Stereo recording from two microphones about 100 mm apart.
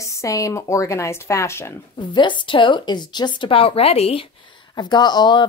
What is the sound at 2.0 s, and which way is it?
A woman's voice, 50° left (ahead or behind).